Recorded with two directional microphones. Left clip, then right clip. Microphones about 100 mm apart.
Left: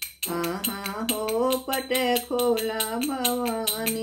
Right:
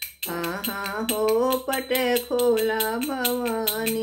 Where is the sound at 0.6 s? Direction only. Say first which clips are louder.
Right 3 dB; 20° left (ahead or behind).